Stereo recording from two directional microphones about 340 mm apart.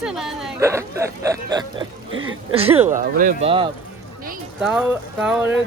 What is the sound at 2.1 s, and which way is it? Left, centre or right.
Speech, right.